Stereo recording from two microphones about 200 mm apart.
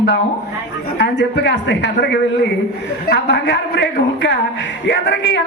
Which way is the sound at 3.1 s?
60° left (ahead or behind).